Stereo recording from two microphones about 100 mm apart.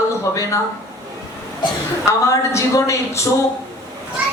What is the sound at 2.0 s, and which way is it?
A woman's voice, 30° left (ahead or behind).